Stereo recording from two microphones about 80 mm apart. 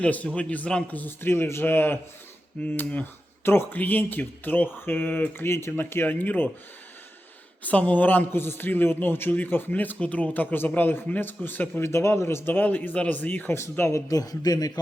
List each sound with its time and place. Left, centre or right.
0.0 s a man's voice: centre
7.6 s a man's voice: centre
13.6 s speech: left
14.1 s speech: left